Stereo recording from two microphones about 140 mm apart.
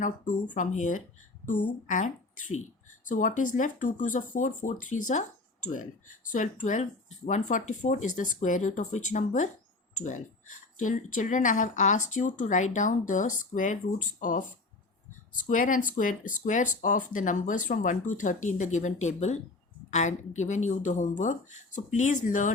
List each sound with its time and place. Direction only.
0.5 s speech: 65° left (ahead or behind)
15.4 s speech: 70° left (ahead or behind)